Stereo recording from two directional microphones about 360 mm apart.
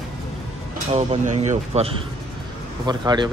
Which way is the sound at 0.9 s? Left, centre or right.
Centre.